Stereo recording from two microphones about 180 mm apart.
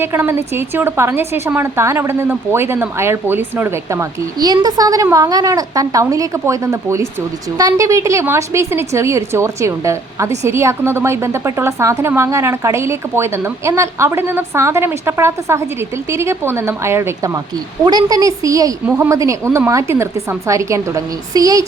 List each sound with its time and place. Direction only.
0.0 s a woman's voice: 10° right (ahead or behind)